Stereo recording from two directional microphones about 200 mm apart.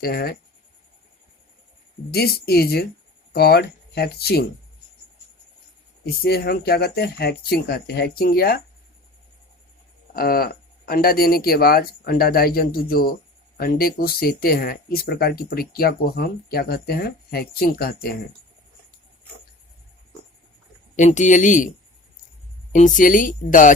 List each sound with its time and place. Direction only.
0.0 s speech: 50° left (ahead or behind)
2.0 s speech: 50° left (ahead or behind)
6.2 s speech: 50° left (ahead or behind)
10.2 s speech: 45° left (ahead or behind)
20.9 s speech: 35° left (ahead or behind)
22.7 s speech: 40° left (ahead or behind)